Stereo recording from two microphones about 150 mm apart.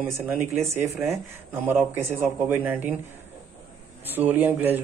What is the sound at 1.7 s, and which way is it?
Speech, 15° right (ahead or behind).